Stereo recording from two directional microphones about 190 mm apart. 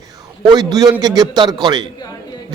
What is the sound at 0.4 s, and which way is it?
A man's voice, 20° right (ahead or behind).